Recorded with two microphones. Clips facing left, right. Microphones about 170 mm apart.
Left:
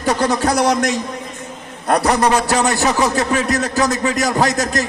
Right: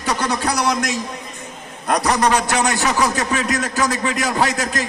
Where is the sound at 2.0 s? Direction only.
35° left (ahead or behind).